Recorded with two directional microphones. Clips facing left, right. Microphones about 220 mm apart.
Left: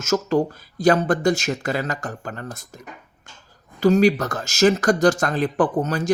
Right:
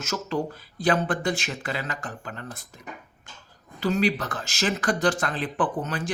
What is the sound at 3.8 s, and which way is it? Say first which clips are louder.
Speech: left 8 dB; 45° left (ahead or behind).